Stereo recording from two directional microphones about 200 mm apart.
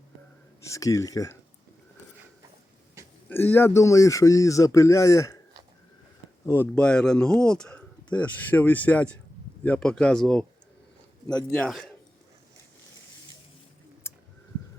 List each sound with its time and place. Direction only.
0.6 s speech: 15° left (ahead or behind)
3.2 s speech: 10° left (ahead or behind)
6.4 s speech: 10° left (ahead or behind)
11.5 s speech: 5° left (ahead or behind)
14.0 s a sound: 10° left (ahead or behind)